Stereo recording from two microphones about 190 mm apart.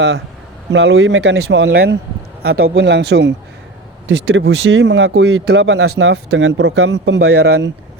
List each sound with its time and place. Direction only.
0.7 s speech: 70° right (ahead or behind)